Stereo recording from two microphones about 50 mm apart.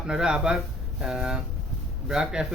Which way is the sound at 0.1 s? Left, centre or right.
Centre.